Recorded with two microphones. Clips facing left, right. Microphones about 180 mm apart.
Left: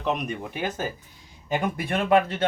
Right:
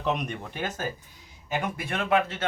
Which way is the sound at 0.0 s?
Centre (ahead or behind).